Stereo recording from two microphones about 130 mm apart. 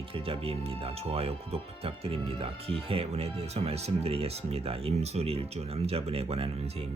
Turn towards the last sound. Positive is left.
turn(degrees=-50)  # may be behind; listen again after turning